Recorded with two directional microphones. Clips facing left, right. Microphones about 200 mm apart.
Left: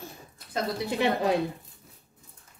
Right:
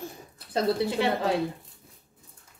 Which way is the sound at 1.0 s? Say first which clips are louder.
Left 4 dB; 15° left (ahead or behind).